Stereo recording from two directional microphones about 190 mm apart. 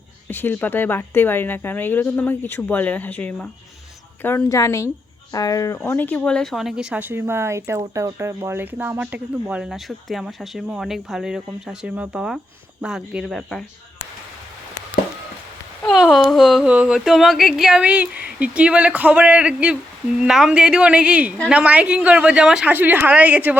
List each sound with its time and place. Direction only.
0.3 s a woman's voice: 10° left (ahead or behind)
15.8 s a woman's voice: centre (ahead or behind)